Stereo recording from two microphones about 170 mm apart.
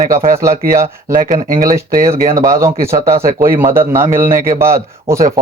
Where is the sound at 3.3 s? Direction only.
55° right (ahead or behind).